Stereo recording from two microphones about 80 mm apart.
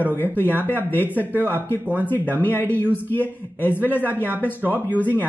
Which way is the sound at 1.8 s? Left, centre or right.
Right.